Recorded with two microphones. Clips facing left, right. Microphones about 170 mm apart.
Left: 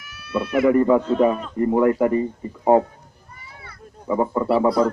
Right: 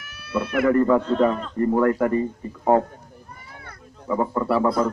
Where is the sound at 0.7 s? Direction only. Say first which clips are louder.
Left 2 dB; 15° left (ahead or behind).